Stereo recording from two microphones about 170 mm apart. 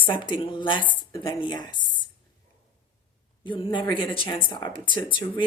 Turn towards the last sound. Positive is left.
turn(degrees=30)  # may be behind; listen again after turning